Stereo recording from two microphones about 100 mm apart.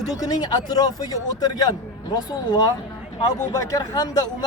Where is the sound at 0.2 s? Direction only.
45° left (ahead or behind).